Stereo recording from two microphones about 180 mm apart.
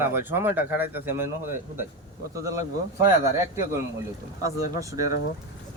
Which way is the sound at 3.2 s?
15° right (ahead or behind).